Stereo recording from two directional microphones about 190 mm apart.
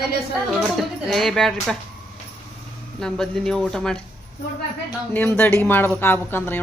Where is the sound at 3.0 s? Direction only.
5° left (ahead or behind).